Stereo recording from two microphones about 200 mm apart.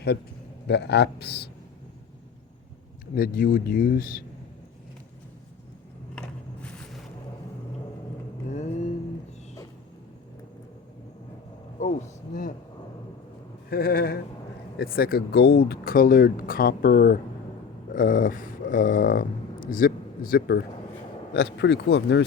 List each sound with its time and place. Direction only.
0.7 s speech: 55° left (ahead or behind)
3.2 s speech: 45° left (ahead or behind)
6.1 s a sound: 5° left (ahead or behind)
11.8 s a man's voice: 40° left (ahead or behind)
13.7 s speech: 50° left (ahead or behind)